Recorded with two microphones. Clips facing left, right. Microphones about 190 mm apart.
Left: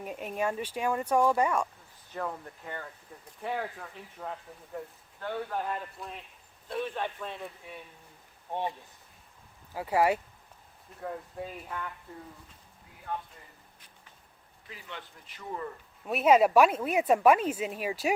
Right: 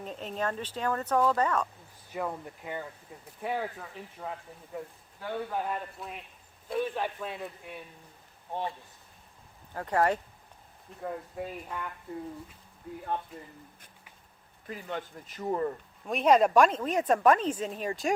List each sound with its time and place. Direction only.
0.0 s speech: 10° left (ahead or behind)
2.1 s speech: 10° right (ahead or behind)
9.7 s speech: 5° left (ahead or behind)
11.0 s speech: 5° right (ahead or behind)
14.7 s speech: 45° right (ahead or behind)
16.0 s speech: 5° left (ahead or behind)